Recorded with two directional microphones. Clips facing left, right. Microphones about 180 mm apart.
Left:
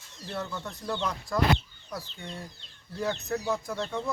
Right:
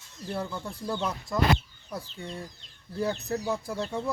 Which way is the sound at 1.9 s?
30° right (ahead or behind).